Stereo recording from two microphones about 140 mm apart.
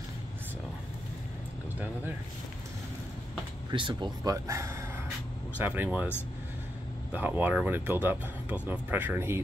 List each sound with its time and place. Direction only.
3.7 s speech: 35° right (ahead or behind); by 6.0 s 10° right (ahead or behind)
7.1 s speech: 10° right (ahead or behind)